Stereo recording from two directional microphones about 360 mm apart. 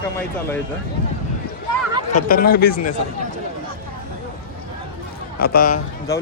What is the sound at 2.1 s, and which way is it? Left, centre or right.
Speech, left.